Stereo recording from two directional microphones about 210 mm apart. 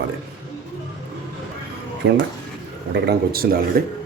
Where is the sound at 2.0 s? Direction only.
55° right (ahead or behind).